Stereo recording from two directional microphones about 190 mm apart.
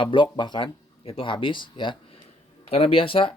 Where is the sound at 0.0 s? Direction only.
25° left (ahead or behind).